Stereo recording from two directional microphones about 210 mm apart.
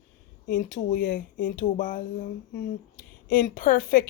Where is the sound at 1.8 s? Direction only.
40° left (ahead or behind).